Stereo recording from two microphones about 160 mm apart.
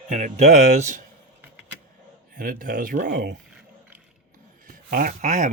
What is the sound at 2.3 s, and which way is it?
Speech, 60° right (ahead or behind).